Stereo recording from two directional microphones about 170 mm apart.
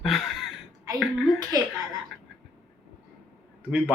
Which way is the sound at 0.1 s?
Centre (ahead or behind).